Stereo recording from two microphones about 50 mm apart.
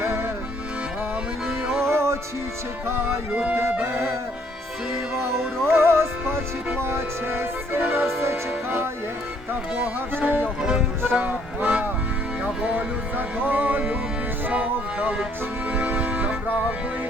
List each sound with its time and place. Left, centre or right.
0.0 s music: right
1.8 s music: right
3.3 s music: right
5.6 s music: right
8.2 s music: right
10.2 s music: right
10.6 s speech: centre
11.2 s music: right